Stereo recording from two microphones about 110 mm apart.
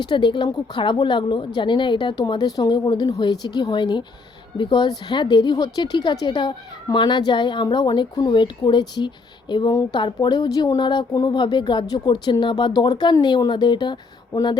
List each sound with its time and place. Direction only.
0.0 s speech: 45° left (ahead or behind)